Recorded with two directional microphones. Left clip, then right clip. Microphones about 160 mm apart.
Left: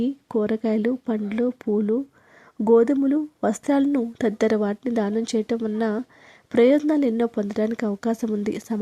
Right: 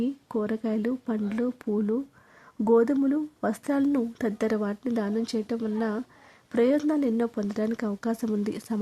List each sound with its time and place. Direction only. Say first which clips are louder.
0.0 s speech: left 5 dB; 25° left (ahead or behind)